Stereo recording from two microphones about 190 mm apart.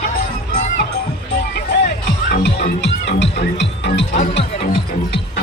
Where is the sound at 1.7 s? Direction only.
55° left (ahead or behind).